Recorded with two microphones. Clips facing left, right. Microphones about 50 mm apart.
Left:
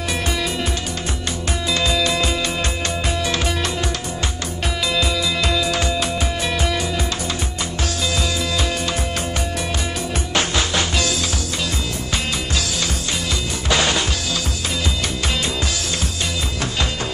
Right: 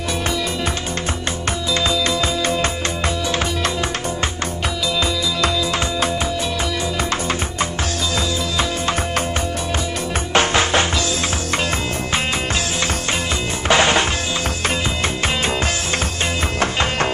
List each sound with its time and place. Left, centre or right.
10.3 s music: right
12.1 s music: right
15.2 s music: right